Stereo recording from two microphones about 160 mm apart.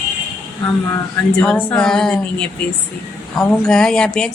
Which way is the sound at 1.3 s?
5° left (ahead or behind).